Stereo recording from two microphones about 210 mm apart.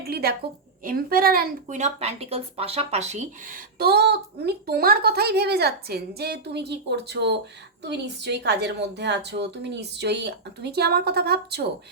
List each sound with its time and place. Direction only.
0.0 s a woman's voice: 45° right (ahead or behind)